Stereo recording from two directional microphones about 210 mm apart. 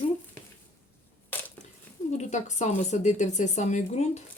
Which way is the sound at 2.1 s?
35° left (ahead or behind).